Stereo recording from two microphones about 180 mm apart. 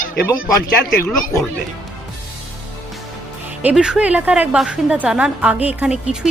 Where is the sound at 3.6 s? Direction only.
5° right (ahead or behind).